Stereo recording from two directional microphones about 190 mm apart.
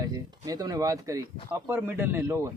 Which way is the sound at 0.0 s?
20° right (ahead or behind).